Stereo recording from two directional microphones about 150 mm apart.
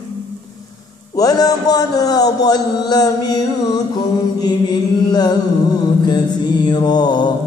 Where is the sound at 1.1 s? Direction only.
25° left (ahead or behind).